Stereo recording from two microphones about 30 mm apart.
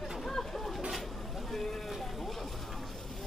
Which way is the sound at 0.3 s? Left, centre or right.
Centre.